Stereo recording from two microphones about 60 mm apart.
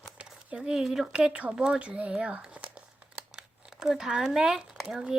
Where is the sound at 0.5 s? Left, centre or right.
Centre.